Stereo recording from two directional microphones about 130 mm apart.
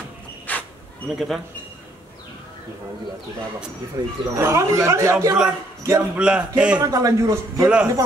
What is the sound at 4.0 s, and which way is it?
Speech, 25° right (ahead or behind).